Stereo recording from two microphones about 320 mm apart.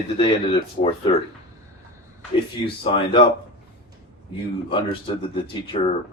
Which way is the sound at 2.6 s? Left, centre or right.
Centre.